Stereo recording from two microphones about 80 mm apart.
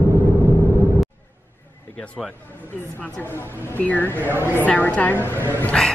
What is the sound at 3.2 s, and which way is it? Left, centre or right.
Speech, left.